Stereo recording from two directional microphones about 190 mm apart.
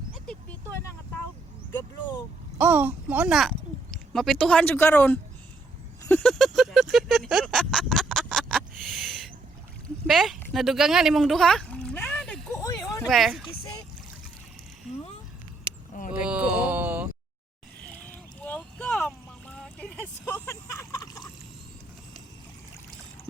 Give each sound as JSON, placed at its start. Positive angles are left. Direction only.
{"t": 2.6, "sound": "speech", "side_deg": -10}
{"t": 6.0, "sound": "a sound", "side_deg": 5}
{"t": 12.6, "sound": "a sound", "side_deg": 15}
{"t": 13.1, "sound": "speech", "side_deg": 0}
{"t": 16.1, "sound": "groan", "side_deg": -5}
{"t": 17.8, "sound": "boat", "side_deg": 10}